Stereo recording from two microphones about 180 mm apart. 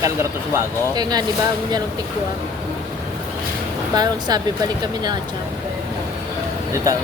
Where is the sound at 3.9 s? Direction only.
20° right (ahead or behind).